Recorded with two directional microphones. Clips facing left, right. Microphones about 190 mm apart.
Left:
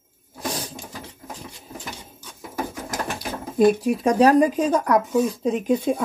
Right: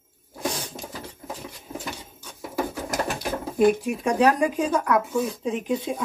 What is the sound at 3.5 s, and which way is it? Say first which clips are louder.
Speech: left 3 dB; 35° left (ahead or behind).